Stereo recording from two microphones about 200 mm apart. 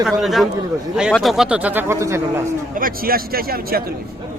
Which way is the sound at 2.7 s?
45° right (ahead or behind).